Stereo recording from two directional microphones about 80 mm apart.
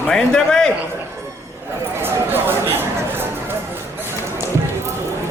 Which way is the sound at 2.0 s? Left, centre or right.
Right.